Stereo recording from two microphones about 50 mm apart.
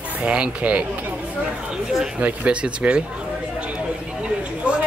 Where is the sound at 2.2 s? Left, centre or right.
Right.